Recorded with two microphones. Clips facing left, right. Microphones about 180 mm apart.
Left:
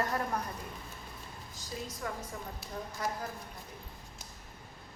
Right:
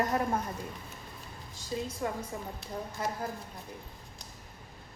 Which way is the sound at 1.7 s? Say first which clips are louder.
Right 6 dB; 25° right (ahead or behind).